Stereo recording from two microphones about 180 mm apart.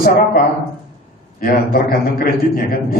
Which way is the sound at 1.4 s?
55° left (ahead or behind).